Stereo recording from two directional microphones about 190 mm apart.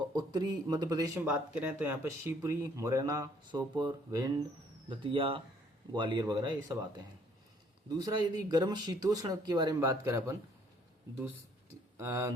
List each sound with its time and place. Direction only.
0.0 s speech: 20° right (ahead or behind)